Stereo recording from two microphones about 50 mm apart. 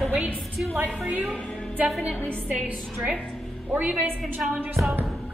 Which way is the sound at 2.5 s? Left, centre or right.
Right.